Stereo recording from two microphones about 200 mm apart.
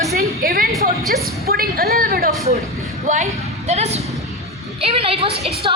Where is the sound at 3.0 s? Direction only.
35° right (ahead or behind).